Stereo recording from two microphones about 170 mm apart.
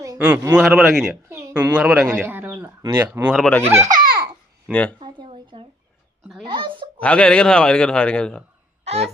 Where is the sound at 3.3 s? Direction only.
5° left (ahead or behind).